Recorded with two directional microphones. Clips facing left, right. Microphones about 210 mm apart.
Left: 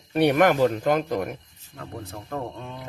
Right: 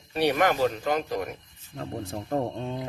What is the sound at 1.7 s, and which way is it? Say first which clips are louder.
Speech: right 3 dB; 30° right (ahead or behind).